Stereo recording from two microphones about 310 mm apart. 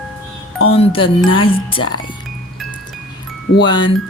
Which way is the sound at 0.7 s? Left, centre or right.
Centre.